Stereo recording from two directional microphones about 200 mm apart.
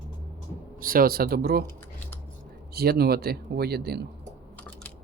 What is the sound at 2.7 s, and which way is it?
A man's voice, 55° right (ahead or behind).